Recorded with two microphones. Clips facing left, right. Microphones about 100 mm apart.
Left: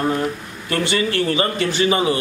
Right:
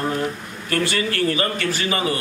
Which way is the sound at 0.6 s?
25° left (ahead or behind).